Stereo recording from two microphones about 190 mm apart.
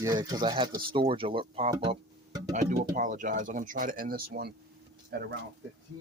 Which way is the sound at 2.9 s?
45° right (ahead or behind).